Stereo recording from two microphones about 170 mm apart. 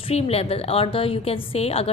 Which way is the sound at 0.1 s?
35° left (ahead or behind).